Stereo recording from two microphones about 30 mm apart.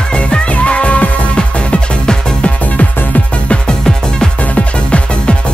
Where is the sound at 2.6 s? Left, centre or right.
Left.